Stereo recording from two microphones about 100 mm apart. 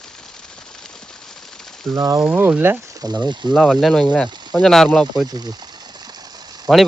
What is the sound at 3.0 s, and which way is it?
Speech, 45° right (ahead or behind).